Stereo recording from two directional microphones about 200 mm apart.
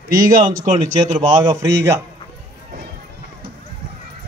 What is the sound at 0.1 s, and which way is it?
Speech, 45° right (ahead or behind).